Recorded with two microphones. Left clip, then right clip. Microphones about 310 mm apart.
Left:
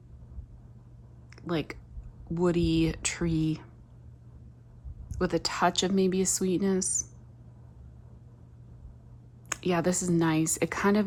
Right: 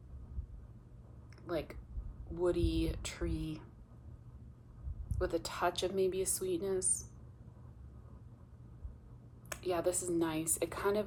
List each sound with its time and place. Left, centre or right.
1.4 s a woman's voice: left
5.1 s a woman's voice: left
9.5 s a woman's voice: left